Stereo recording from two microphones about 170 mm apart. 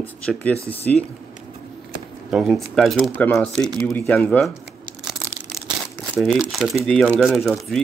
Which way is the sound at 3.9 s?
15° left (ahead or behind).